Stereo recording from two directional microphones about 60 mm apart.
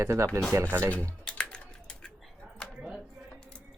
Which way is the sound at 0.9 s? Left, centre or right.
Left.